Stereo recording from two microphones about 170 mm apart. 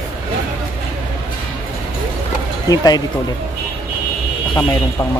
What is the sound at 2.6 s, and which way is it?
Speech, 20° left (ahead or behind).